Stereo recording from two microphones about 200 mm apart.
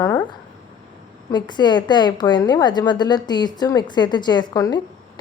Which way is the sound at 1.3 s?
20° left (ahead or behind).